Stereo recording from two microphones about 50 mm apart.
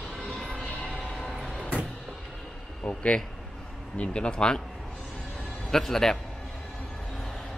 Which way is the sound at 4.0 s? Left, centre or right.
Centre.